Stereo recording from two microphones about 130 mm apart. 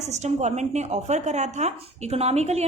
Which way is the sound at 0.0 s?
60° right (ahead or behind).